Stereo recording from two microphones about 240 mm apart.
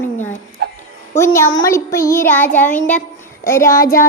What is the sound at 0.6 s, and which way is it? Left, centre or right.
Music, right.